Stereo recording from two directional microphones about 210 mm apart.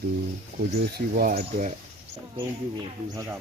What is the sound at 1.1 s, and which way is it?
Speech, 45° right (ahead or behind).